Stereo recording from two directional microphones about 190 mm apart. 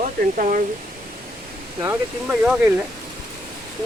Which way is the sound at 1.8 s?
15° right (ahead or behind).